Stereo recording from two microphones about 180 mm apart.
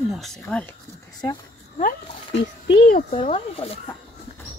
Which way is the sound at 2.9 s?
40° left (ahead or behind).